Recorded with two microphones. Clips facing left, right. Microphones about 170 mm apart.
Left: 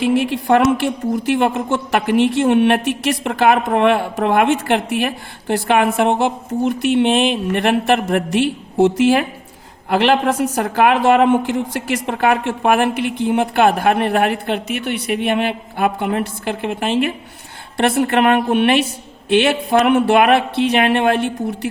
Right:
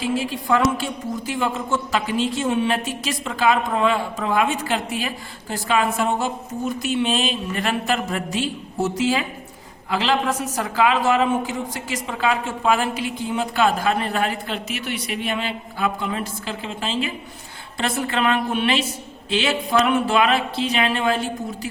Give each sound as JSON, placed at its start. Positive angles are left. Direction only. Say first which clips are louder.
{"t": 0.0, "sound": "a woman's voice", "louder": "left 7 dB", "side_deg": 65}